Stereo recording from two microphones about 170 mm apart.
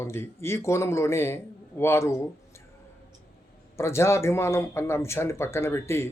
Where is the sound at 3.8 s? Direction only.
15° left (ahead or behind).